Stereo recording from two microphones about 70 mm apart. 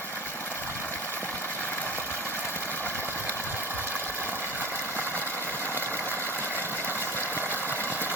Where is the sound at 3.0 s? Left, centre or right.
Right.